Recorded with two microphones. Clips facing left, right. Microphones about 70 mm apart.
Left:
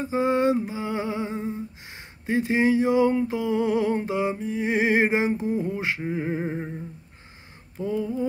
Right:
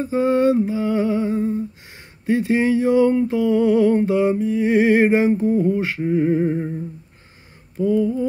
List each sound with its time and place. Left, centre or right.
0.0 s humming: centre
3.2 s music: centre
7.8 s humming: left